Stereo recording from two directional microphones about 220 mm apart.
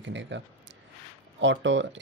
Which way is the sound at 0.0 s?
55° right (ahead or behind).